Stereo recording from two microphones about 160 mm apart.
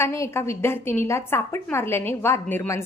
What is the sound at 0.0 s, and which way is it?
A woman's voice, 15° left (ahead or behind).